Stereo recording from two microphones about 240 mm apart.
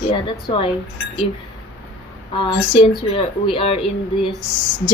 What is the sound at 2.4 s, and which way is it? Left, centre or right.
Speech, left.